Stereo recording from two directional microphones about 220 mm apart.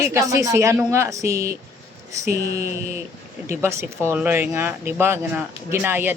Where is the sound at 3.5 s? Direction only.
10° right (ahead or behind).